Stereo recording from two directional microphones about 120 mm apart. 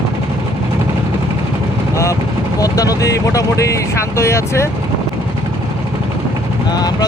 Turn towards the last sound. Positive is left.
turn(degrees=35)  # may be behind; listen again after turning